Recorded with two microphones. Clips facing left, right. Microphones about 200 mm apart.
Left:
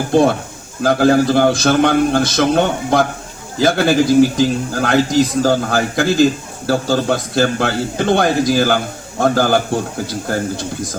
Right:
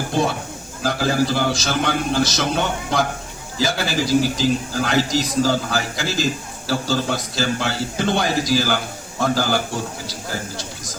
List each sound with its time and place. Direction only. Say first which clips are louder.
0.1 s a man's voice: left 10 dB; 55° left (ahead or behind)